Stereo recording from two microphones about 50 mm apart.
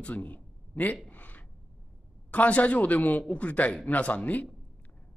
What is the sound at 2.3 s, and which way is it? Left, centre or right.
Speech, left.